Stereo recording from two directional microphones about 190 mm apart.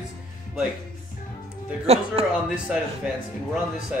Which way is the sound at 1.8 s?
35° right (ahead or behind).